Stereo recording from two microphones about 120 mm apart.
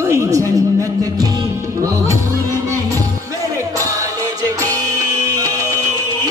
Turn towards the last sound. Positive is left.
turn(degrees=-30)  # may be behind; listen again after turning